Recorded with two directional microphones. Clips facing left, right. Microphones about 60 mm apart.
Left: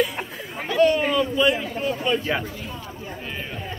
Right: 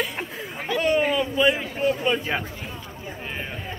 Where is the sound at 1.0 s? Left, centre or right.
Centre.